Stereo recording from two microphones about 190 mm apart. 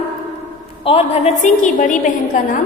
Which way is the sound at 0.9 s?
30° left (ahead or behind).